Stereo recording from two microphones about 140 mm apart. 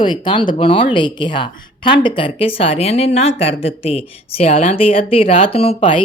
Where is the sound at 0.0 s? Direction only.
35° left (ahead or behind).